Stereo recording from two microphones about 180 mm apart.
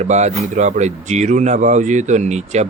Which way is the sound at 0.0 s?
40° right (ahead or behind).